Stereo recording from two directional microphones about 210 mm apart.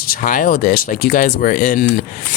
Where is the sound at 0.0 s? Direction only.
40° left (ahead or behind).